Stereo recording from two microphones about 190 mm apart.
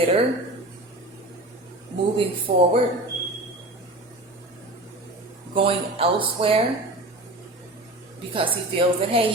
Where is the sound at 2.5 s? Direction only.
30° right (ahead or behind).